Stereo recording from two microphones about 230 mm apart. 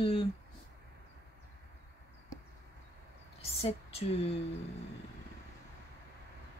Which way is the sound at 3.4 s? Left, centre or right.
Left.